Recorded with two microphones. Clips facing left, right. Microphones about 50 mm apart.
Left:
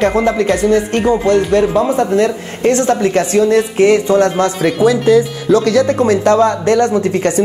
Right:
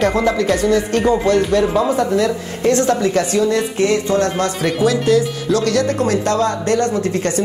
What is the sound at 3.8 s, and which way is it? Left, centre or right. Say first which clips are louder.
Speech: left 6 dB; left.